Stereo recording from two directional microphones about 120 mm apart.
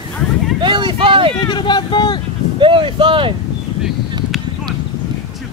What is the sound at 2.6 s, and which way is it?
Speech, 45° right (ahead or behind).